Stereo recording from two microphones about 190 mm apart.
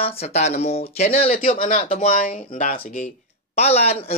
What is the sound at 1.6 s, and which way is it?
Speech, 45° left (ahead or behind).